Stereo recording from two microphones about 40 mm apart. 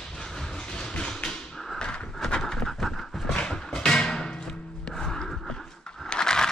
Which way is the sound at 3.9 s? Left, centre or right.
Centre.